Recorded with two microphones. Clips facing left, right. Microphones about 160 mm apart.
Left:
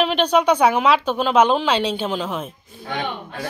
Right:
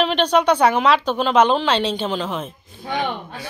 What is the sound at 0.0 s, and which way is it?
Speech, 5° left (ahead or behind).